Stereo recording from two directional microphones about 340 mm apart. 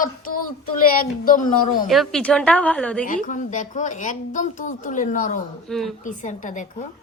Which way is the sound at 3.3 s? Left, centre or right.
Left.